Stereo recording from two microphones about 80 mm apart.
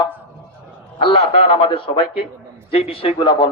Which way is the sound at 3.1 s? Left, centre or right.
Left.